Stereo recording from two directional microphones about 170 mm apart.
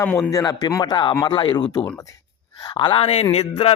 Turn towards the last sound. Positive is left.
turn(degrees=40)  # may be behind; listen again after turning